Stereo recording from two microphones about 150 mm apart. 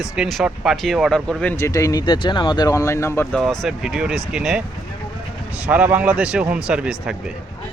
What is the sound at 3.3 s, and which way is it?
Speech, centre (ahead or behind).